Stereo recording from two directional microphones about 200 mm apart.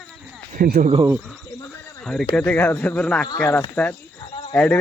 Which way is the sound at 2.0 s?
5° left (ahead or behind).